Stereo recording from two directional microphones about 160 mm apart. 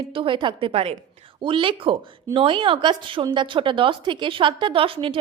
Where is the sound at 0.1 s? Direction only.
30° right (ahead or behind).